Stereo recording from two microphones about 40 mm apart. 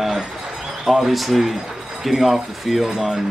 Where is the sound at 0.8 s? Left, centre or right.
Centre.